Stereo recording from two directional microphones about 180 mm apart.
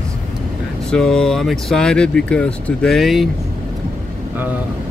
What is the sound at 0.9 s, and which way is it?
Speech, 5° left (ahead or behind).